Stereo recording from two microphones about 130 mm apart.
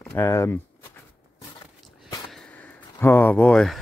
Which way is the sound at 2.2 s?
5° left (ahead or behind).